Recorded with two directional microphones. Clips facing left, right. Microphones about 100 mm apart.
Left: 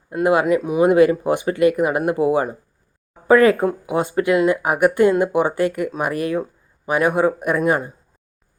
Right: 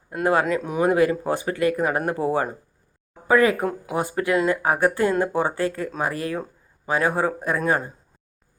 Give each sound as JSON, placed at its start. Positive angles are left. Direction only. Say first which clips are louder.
{"t": 0.1, "sound": "speech", "louder": "left 4 dB", "side_deg": 15}